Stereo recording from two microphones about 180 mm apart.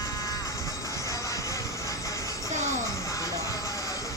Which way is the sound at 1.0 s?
15° left (ahead or behind).